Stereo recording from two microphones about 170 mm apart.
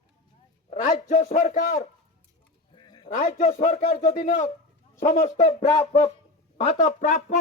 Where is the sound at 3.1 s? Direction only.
45° left (ahead or behind).